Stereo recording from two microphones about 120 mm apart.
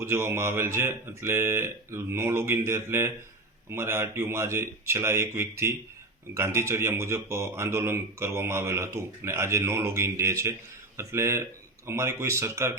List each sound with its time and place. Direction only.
0.0 s speech: 20° right (ahead or behind)